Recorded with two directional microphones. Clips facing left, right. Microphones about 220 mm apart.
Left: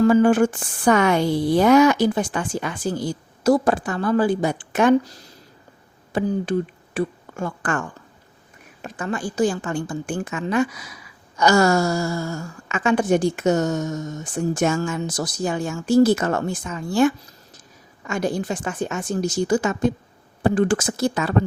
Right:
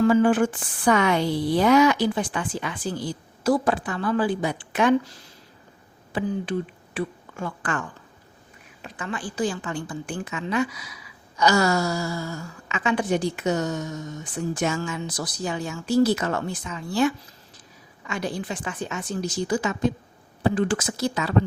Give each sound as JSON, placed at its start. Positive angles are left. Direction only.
{"t": 0.0, "sound": "a woman's voice", "side_deg": 45}